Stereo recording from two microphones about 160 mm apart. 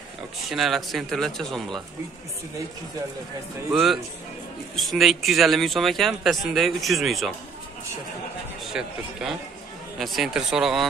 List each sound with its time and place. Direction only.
0.5 s speech: centre (ahead or behind)
3.7 s speech: centre (ahead or behind)
8.7 s speech: 5° right (ahead or behind)
9.9 s speech: centre (ahead or behind)